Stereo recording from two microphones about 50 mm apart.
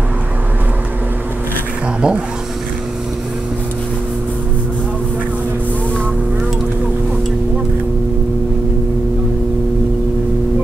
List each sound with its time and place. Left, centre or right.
2.0 s speech: centre